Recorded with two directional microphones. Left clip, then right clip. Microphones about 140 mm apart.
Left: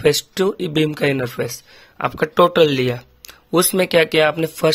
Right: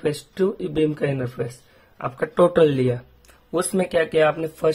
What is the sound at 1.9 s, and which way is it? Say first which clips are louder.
Speech: left 4 dB; 35° left (ahead or behind).